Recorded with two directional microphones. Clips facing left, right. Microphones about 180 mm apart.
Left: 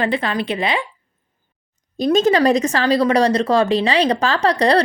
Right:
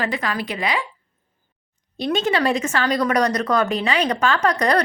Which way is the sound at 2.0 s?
40° left (ahead or behind).